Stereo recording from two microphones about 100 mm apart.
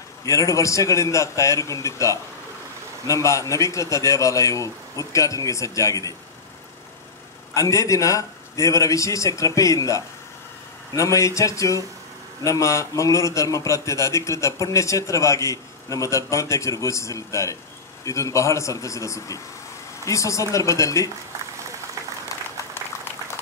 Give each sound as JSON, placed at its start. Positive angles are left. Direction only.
{"t": 0.2, "sound": "a man's voice", "side_deg": 30}
{"t": 7.5, "sound": "a man's voice", "side_deg": 30}
{"t": 22.3, "sound": "applause", "side_deg": 35}